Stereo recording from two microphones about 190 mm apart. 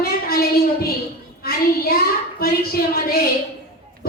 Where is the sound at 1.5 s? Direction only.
50° left (ahead or behind).